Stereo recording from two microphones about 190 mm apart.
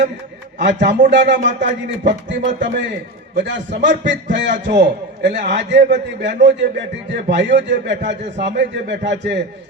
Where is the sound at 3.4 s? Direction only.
65° right (ahead or behind).